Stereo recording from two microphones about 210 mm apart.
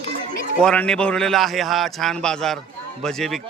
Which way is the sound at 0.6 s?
5° left (ahead or behind).